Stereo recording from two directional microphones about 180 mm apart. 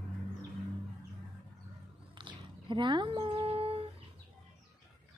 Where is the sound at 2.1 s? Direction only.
25° right (ahead or behind).